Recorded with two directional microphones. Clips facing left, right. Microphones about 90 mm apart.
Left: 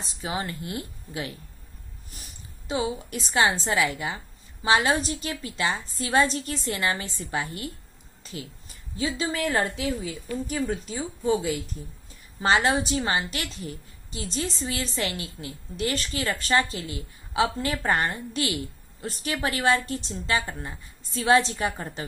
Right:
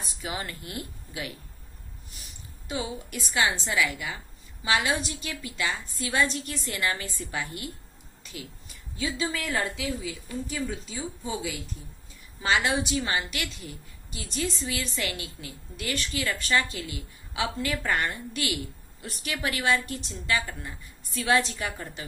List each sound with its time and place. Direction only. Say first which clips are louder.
0.0 s a woman's voice: left 4 dB; 25° left (ahead or behind)
2.6 s a woman's voice: left 5 dB; 25° left (ahead or behind)
8.2 s a sound: left 4 dB; 30° left (ahead or behind)
9.0 s a woman's voice: left 3 dB; 35° left (ahead or behind)
10.4 s a woman's voice: left 5 dB; 50° left (ahead or behind)
12.4 s a woman's voice: left 3 dB; 35° left (ahead or behind)